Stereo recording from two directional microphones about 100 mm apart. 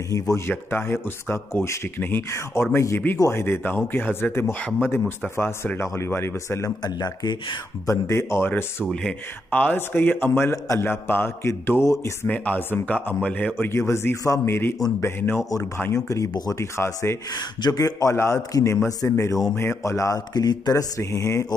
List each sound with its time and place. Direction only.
0.1 s speech: 25° left (ahead or behind)
6.8 s speech: 45° left (ahead or behind)
7.8 s speech: 30° left (ahead or behind)
12.3 s a man's voice: 15° left (ahead or behind)
13.6 s speech: 25° left (ahead or behind)
17.6 s speech: 40° left (ahead or behind)
21.0 s speech: 30° left (ahead or behind)